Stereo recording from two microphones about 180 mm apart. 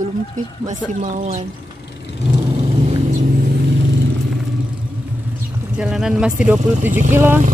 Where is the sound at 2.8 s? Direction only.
40° right (ahead or behind).